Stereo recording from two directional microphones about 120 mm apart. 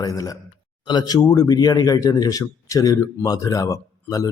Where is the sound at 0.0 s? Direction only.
30° left (ahead or behind).